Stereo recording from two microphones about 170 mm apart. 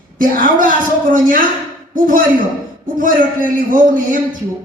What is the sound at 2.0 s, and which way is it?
A man's voice, 55° right (ahead or behind).